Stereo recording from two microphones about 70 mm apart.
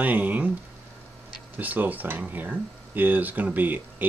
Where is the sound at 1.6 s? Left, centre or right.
Right.